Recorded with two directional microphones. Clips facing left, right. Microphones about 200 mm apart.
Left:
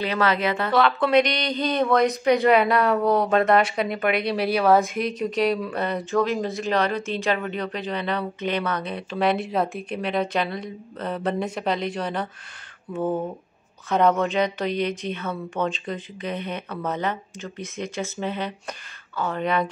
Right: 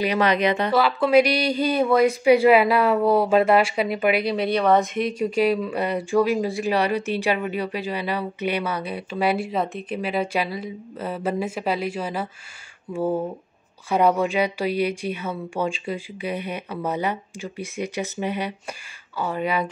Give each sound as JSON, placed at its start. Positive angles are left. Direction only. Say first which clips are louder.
{"t": 0.0, "sound": "speech", "louder": "right 3 dB", "side_deg": -15}
{"t": 0.7, "sound": "speech", "louder": "right 1 dB", "side_deg": -5}